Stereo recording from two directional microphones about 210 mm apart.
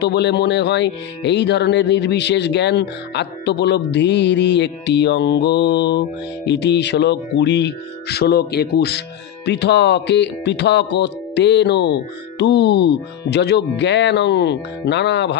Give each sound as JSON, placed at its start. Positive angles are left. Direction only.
{"t": 0.0, "sound": "speech", "side_deg": 55}